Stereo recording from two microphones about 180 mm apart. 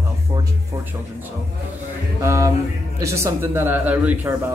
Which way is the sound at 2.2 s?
15° right (ahead or behind).